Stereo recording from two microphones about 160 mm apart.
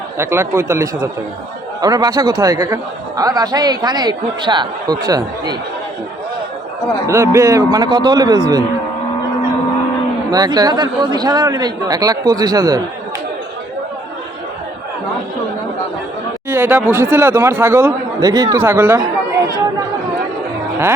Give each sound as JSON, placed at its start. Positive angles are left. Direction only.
{"t": 0.2, "sound": "a man's voice", "side_deg": -15}
{"t": 7.1, "sound": "a man's voice", "side_deg": -20}
{"t": 10.3, "sound": "a man's voice", "side_deg": -25}
{"t": 16.5, "sound": "speech", "side_deg": -15}
{"t": 18.9, "sound": "chatter", "side_deg": -25}